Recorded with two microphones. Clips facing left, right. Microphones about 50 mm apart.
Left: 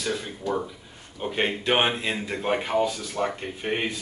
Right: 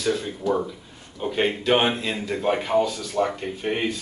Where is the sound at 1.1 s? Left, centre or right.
Centre.